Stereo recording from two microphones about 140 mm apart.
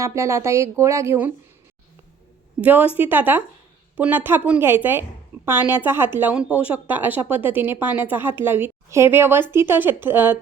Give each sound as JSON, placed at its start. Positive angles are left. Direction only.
{"t": 0.0, "sound": "speech", "side_deg": -20}
{"t": 2.6, "sound": "speech", "side_deg": -10}